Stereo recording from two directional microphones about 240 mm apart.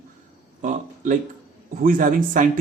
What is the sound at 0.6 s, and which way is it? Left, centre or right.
Speech, right.